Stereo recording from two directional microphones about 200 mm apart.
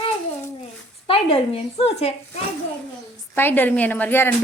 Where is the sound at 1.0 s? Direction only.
25° left (ahead or behind).